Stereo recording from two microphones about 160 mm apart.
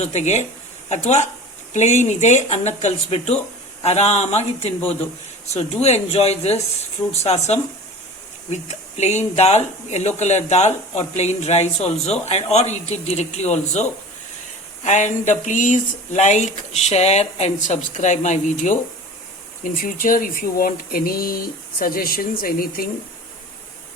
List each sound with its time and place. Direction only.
0.1 s speech: 45° left (ahead or behind); by 22.9 s 65° left (ahead or behind)